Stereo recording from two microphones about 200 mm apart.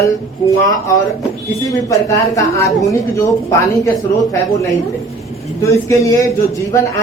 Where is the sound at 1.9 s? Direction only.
15° left (ahead or behind).